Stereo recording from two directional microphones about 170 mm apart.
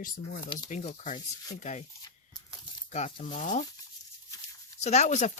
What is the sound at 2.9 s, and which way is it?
Speech, 45° left (ahead or behind).